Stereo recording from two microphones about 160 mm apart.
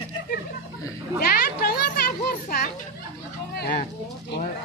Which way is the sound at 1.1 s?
70° left (ahead or behind).